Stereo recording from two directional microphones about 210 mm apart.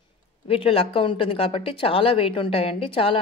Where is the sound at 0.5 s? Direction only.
25° left (ahead or behind).